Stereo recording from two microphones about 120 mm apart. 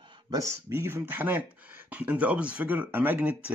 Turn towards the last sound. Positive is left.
turn(degrees=-10)  # may be behind; listen again after turning